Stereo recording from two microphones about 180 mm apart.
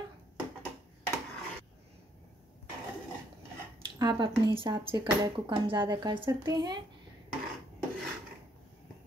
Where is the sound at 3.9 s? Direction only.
25° right (ahead or behind).